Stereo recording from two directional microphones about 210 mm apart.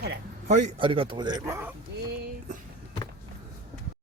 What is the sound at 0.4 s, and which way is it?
Speech, 35° right (ahead or behind).